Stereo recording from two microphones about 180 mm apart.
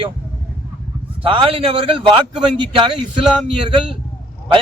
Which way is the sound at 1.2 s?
30° right (ahead or behind).